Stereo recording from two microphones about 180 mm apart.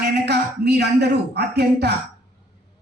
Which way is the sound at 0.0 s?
65° right (ahead or behind).